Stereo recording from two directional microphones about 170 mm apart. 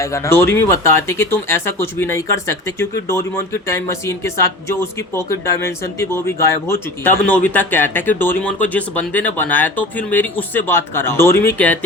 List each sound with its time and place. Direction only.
0.0 s speech: 15° left (ahead or behind)